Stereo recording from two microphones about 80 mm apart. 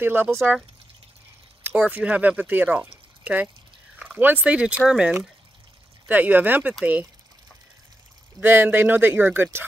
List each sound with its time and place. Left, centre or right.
0.0 s speech: right
0.4 s speech: centre
1.6 s speech: centre
6.0 s speech: right
8.4 s speech: right